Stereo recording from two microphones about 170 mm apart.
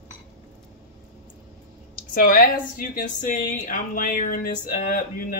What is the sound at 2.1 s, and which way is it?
A woman's voice, 60° left (ahead or behind).